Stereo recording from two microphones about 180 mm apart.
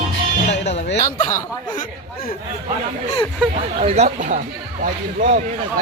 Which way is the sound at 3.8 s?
40° right (ahead or behind).